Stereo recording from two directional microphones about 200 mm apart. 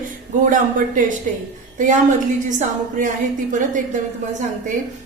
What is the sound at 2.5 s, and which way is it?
Speech, 40° right (ahead or behind).